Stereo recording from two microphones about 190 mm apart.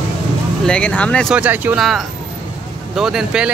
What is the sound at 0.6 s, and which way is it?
Speech, 5° left (ahead or behind).